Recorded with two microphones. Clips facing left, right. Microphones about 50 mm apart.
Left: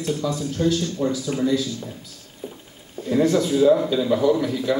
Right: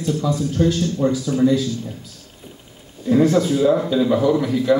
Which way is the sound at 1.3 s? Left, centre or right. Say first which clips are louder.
Right 9 dB; left.